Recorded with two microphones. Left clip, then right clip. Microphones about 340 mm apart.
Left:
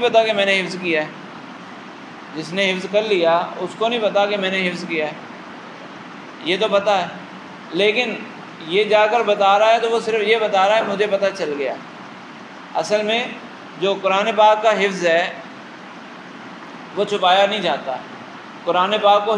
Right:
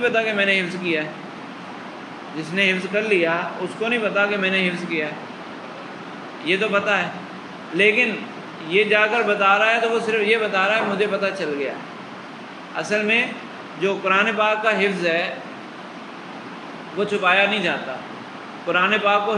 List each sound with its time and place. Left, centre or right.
0.0 s a man's voice: centre
2.5 s a man's voice: centre
6.4 s a man's voice: centre
12.7 s a man's voice: centre
17.0 s a man's voice: centre